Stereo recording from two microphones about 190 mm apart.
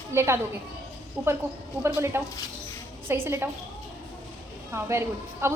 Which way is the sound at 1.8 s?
15° right (ahead or behind).